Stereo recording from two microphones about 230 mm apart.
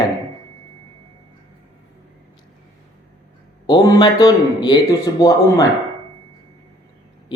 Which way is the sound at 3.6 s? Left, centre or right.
Centre.